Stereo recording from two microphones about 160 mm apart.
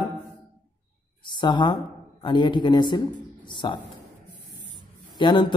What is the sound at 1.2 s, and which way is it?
A woman's voice, 30° left (ahead or behind).